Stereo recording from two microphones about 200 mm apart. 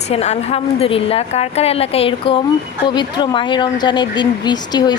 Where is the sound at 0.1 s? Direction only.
30° left (ahead or behind).